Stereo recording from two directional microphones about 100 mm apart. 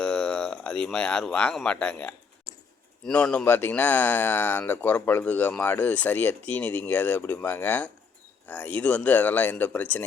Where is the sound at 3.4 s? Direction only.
20° left (ahead or behind).